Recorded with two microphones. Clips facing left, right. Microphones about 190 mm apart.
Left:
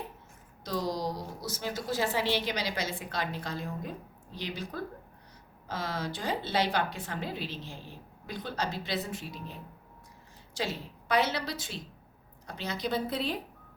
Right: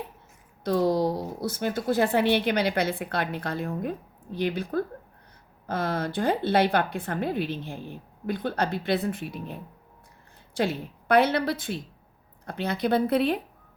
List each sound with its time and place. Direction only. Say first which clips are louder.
0.6 s a woman's voice: right 9 dB; 55° right (ahead or behind)